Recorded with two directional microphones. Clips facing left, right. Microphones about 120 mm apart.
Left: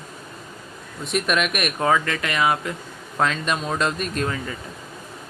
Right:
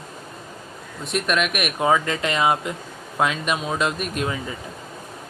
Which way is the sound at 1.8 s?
20° right (ahead or behind).